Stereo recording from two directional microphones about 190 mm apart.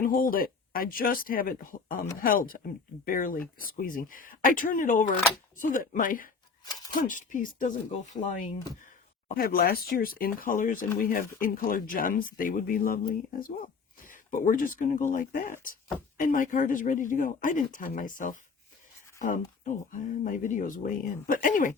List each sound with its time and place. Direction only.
0.0 s speech: 45° left (ahead or behind)
9.3 s speech: 50° left (ahead or behind)